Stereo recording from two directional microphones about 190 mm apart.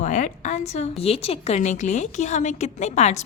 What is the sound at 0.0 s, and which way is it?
A woman's voice, 40° left (ahead or behind).